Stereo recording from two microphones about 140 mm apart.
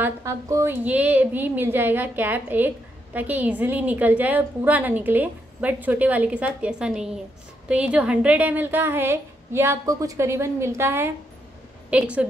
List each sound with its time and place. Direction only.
0.0 s a woman's voice: 20° right (ahead or behind)
0.8 s a woman's voice: 10° right (ahead or behind)